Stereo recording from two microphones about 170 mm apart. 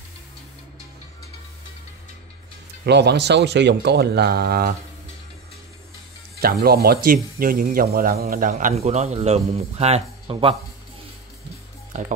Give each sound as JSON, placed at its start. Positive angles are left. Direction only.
{"t": 2.8, "sound": "speech", "side_deg": -80}
{"t": 6.4, "sound": "speech", "side_deg": -65}
{"t": 11.9, "sound": "speech", "side_deg": -45}